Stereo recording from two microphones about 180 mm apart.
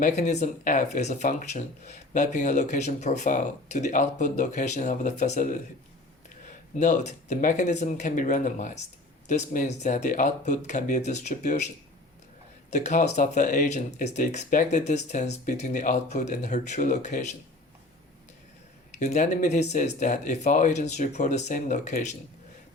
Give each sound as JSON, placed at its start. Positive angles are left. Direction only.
{"t": 0.0, "sound": "speech", "side_deg": 40}
{"t": 6.7, "sound": "speech", "side_deg": 40}
{"t": 12.7, "sound": "speech", "side_deg": 40}
{"t": 18.9, "sound": "speech", "side_deg": 40}